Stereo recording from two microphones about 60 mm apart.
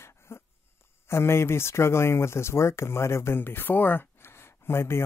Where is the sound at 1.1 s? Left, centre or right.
Left.